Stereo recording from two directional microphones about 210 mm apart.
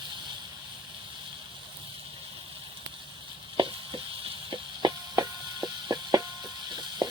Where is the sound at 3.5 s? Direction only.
25° right (ahead or behind).